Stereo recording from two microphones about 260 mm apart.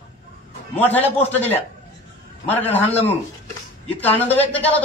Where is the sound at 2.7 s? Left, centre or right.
Centre.